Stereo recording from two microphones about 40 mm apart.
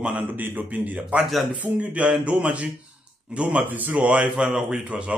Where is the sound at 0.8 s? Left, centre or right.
Right.